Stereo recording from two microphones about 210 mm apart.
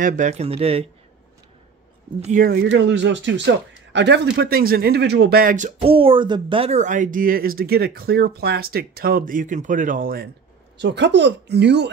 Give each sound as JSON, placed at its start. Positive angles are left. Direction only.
{"t": 0.0, "sound": "speech", "side_deg": -35}
{"t": 2.2, "sound": "speech", "side_deg": -40}
{"t": 5.8, "sound": "speech", "side_deg": -25}
{"t": 10.8, "sound": "speech", "side_deg": -55}